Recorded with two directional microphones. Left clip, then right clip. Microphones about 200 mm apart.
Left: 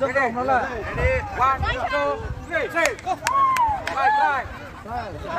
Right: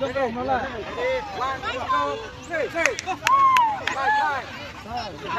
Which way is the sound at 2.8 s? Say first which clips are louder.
Right 1 dB; 50° left (ahead or behind).